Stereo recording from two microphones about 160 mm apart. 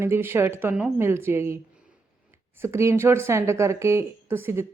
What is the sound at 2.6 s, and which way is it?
A woman's voice, 15° right (ahead or behind).